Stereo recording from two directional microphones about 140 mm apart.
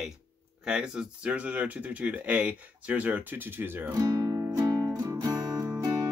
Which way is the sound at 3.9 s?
25° right (ahead or behind).